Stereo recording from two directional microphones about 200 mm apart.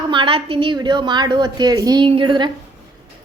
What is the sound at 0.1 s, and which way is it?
A woman's voice, 25° right (ahead or behind).